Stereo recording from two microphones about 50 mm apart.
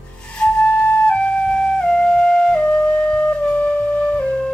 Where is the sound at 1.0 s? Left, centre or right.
Left.